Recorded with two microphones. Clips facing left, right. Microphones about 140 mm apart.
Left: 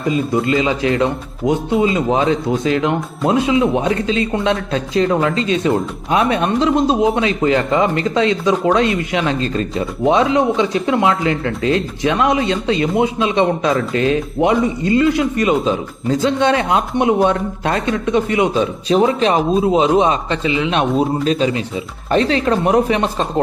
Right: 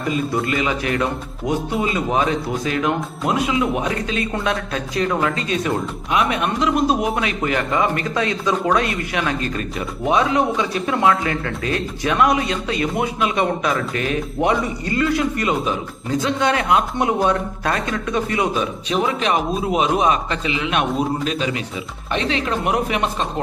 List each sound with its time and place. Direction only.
0.1 s speech: 25° left (ahead or behind)